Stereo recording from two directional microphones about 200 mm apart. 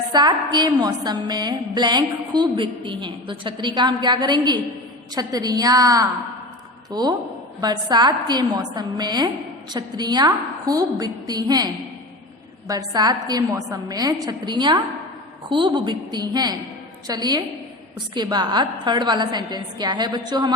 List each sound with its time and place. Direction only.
0.1 s a woman's voice: 20° right (ahead or behind)